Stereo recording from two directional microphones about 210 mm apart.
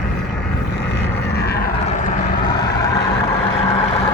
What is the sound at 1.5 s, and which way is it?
Vehicle, 45° left (ahead or behind).